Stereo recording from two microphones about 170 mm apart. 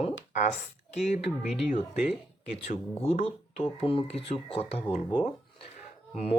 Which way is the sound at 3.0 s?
35° left (ahead or behind).